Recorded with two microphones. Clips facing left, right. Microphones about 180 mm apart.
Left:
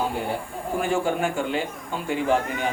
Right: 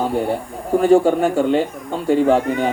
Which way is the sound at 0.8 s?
40° right (ahead or behind).